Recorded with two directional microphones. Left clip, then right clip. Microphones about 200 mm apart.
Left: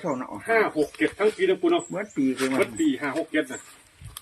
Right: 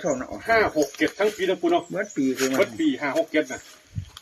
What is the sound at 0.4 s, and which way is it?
Speech, 25° right (ahead or behind).